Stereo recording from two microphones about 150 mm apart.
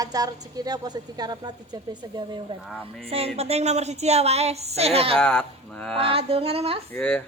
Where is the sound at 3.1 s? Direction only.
40° right (ahead or behind).